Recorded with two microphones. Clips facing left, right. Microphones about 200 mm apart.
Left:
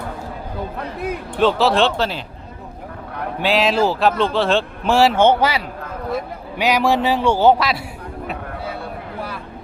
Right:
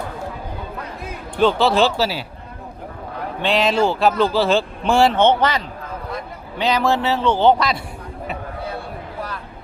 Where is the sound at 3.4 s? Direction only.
5° left (ahead or behind).